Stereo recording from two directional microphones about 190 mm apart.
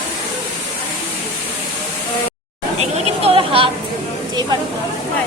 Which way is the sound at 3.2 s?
30° right (ahead or behind).